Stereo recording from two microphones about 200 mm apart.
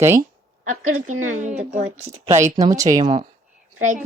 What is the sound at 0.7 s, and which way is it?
Speech, 90° right.